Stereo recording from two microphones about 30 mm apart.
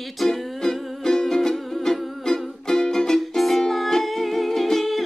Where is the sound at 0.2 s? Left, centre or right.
Centre.